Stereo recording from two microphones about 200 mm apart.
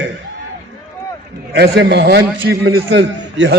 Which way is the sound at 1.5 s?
55° right (ahead or behind).